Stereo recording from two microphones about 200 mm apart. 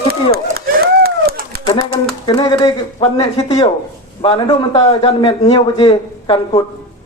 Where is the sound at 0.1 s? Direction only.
50° right (ahead or behind).